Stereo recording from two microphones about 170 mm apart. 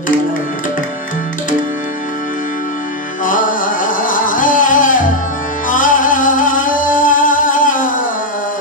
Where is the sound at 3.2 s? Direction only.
50° left (ahead or behind).